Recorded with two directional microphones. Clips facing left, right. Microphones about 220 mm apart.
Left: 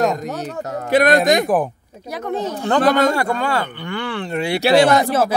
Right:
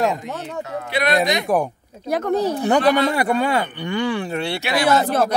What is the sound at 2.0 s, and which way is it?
Speech, 50° right (ahead or behind).